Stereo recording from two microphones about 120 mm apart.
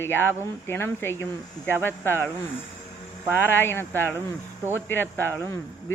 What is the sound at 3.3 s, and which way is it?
Speech, 15° left (ahead or behind).